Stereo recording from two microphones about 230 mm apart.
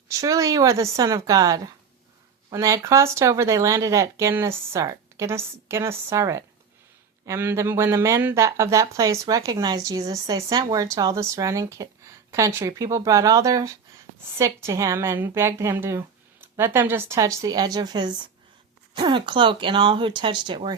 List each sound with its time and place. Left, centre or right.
0.1 s speech: centre